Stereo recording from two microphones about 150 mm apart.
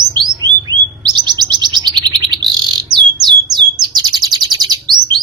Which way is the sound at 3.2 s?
30° right (ahead or behind).